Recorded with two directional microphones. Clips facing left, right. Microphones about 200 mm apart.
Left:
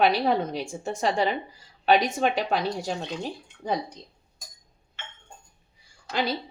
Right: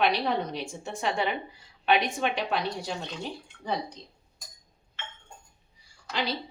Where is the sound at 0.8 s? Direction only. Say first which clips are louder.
Left 4 dB; 40° left (ahead or behind).